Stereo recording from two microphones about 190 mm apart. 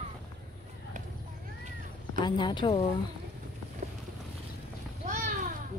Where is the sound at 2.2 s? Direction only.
25° left (ahead or behind).